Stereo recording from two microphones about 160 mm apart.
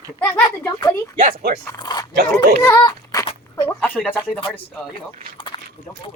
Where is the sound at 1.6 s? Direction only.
25° left (ahead or behind).